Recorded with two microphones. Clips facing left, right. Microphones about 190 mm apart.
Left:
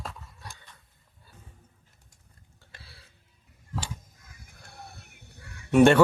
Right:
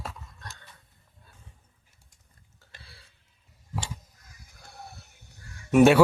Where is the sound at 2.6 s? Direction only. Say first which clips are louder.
Even; centre (ahead or behind).